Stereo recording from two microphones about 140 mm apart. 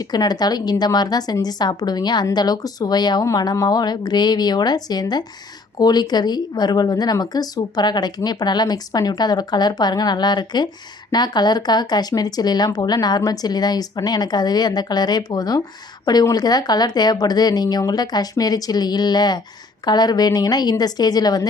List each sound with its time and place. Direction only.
0.0 s a woman's voice: 30° left (ahead or behind)